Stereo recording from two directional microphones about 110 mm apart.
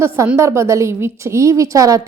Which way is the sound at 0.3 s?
25° right (ahead or behind).